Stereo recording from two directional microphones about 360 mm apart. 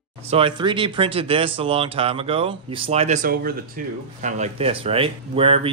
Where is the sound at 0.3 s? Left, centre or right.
Centre.